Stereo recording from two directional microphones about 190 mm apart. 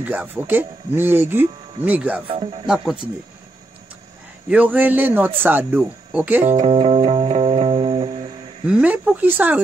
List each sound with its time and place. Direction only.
0.0 s speech: 10° right (ahead or behind)
2.2 s speech: 30° right (ahead or behind)
2.6 s speech: 5° right (ahead or behind)
4.5 s speech: 10° right (ahead or behind)
6.4 s music: 35° right (ahead or behind)
8.6 s speech: 5° right (ahead or behind)